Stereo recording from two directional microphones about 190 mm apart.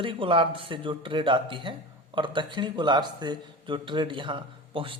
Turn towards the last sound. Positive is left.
turn(degrees=-25)  # may be behind; listen again after turning